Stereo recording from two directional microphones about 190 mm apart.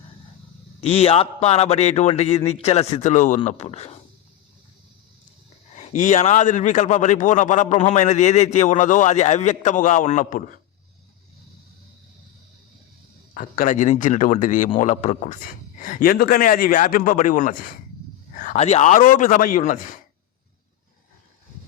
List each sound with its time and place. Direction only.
0.8 s a man's voice: 30° left (ahead or behind)
6.0 s a man's voice: 40° left (ahead or behind)
13.3 s a man's voice: 50° left (ahead or behind)